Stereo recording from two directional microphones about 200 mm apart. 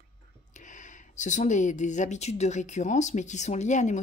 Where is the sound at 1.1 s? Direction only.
35° left (ahead or behind).